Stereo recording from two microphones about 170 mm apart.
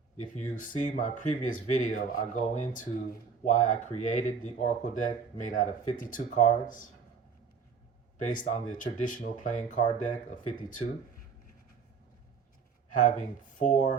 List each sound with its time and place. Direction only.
0.3 s speech: 50° left (ahead or behind)
8.2 s speech: 50° left (ahead or behind)
12.9 s speech: 50° left (ahead or behind)